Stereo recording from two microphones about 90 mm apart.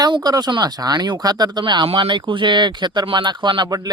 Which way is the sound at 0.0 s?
50° right (ahead or behind).